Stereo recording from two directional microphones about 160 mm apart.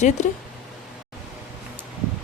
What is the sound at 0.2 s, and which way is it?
Speech, 50° left (ahead or behind).